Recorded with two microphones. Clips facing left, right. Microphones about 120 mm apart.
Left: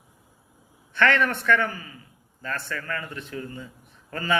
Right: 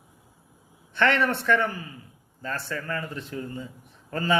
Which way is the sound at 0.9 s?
25° right (ahead or behind).